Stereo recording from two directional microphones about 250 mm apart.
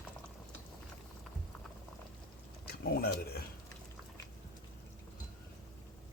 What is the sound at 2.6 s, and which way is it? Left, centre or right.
Speech, left.